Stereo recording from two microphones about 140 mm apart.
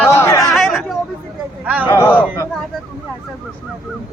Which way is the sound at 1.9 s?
15° left (ahead or behind).